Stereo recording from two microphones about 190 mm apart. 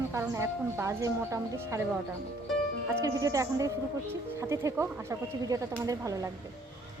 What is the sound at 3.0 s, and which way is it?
Speech, 20° right (ahead or behind).